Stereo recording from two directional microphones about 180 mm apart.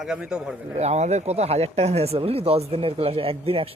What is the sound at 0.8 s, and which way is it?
Speech, 40° right (ahead or behind).